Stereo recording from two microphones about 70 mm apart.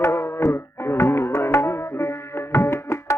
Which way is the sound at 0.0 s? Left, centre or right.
Left.